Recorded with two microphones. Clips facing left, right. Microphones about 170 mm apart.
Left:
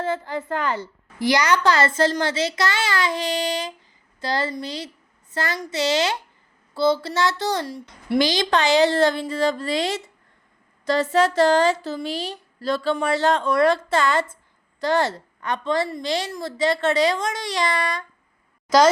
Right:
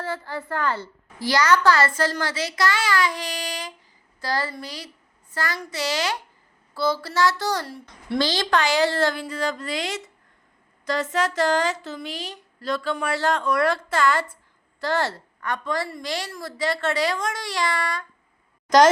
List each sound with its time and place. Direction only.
0.0 s a woman's voice: 20° left (ahead or behind)